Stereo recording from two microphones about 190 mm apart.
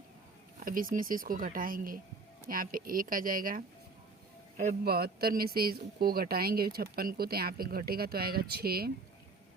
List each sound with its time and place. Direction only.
0.6 s speech: 45° right (ahead or behind)